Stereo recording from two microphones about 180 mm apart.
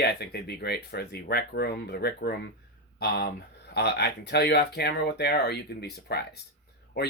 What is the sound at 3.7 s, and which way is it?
Speech, 65° left (ahead or behind).